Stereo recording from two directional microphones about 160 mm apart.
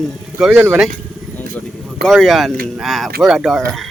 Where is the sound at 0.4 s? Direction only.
10° right (ahead or behind).